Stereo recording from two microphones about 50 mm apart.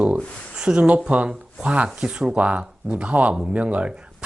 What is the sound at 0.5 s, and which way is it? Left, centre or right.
Speech, centre.